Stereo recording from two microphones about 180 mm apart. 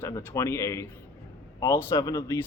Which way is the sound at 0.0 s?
15° left (ahead or behind).